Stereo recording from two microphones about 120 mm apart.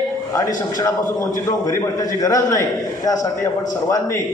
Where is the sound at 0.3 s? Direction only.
30° left (ahead or behind).